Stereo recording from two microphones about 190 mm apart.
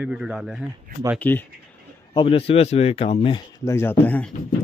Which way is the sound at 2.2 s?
30° left (ahead or behind).